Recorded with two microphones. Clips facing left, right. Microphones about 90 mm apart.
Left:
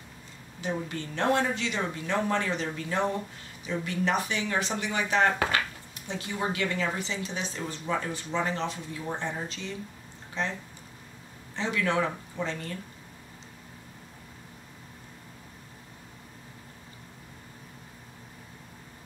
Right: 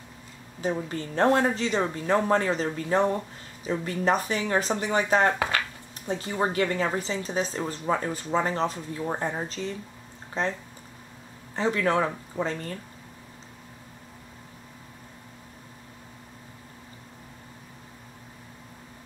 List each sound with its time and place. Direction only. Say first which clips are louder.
0.6 s speech: right 4 dB; 35° right (ahead or behind)
11.5 s speech: right 4 dB; 40° right (ahead or behind)